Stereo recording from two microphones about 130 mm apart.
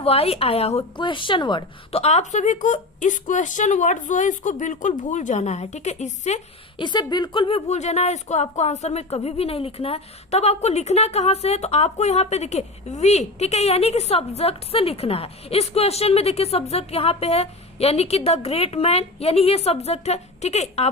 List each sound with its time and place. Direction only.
0.0 s a woman's voice: 50° left (ahead or behind)
0.9 s a woman's voice: 40° left (ahead or behind)
2.0 s a woman's voice: 60° left (ahead or behind)
6.7 s a woman's voice: 35° left (ahead or behind)
7.7 s a woman's voice: 60° left (ahead or behind)